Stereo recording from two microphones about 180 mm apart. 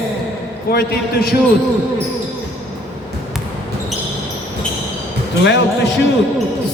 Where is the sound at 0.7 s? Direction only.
55° left (ahead or behind).